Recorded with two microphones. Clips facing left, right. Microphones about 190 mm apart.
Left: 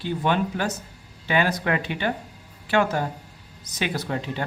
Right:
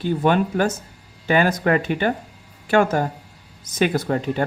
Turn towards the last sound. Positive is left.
turn(degrees=-45)  # may be behind; listen again after turning